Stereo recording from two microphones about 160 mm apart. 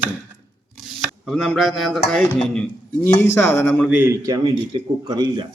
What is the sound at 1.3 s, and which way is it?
Speech, 5° left (ahead or behind).